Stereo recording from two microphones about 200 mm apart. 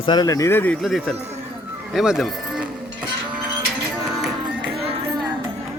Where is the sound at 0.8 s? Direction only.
Centre (ahead or behind).